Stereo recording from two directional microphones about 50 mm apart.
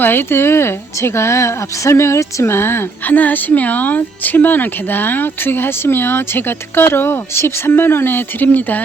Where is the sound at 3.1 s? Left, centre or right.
Left.